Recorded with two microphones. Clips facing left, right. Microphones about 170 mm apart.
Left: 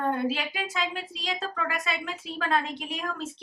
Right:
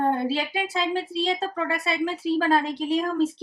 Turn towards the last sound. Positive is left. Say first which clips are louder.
# right 11 dB
turn(degrees=-35)  # may be behind; listen again after turning